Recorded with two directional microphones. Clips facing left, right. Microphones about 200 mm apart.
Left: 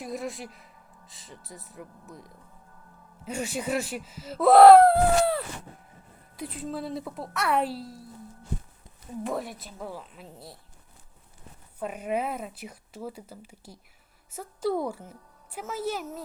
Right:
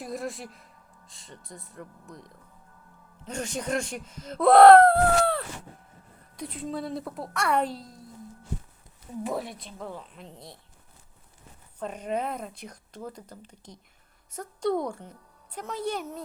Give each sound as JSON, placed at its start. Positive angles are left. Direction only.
{"t": 0.0, "sound": "speech", "side_deg": 0}
{"t": 9.2, "sound": "speech", "side_deg": 0}
{"t": 11.8, "sound": "speech", "side_deg": 10}